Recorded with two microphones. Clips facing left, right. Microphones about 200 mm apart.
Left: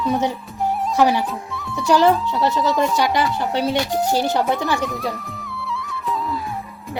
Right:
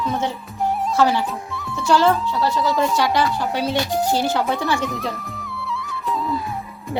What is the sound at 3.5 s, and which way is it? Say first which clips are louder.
Music: left 2 dB; 20° left (ahead or behind).